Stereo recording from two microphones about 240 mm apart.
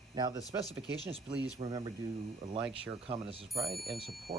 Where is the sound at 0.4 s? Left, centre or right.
Centre.